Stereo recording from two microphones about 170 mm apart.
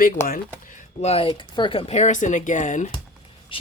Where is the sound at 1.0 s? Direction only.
35° left (ahead or behind).